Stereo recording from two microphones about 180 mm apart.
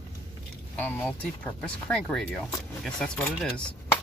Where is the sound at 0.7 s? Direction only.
10° left (ahead or behind).